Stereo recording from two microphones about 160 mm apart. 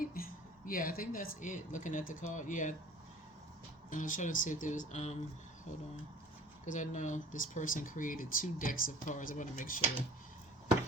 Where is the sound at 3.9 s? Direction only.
55° left (ahead or behind).